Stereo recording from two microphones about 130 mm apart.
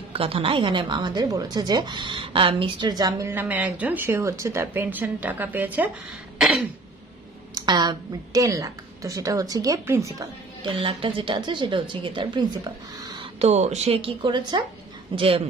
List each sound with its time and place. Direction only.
0.1 s a woman's voice: 45° right (ahead or behind); by 5.9 s 10° right (ahead or behind)
6.3 s throat clearing: 5° right (ahead or behind)
7.5 s a woman's voice: 35° right (ahead or behind)
10.6 s a woman's voice: 45° right (ahead or behind)
13.4 s speech: 60° right (ahead or behind)